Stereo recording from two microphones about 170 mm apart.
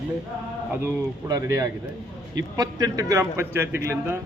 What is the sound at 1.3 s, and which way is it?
A man's voice, 20° right (ahead or behind).